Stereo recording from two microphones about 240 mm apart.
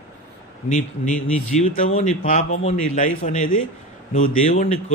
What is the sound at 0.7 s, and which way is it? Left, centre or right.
A man's voice, left.